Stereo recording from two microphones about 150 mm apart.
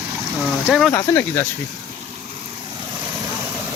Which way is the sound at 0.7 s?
Centre (ahead or behind).